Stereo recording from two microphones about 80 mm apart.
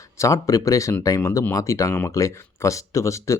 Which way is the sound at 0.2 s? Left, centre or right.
Left.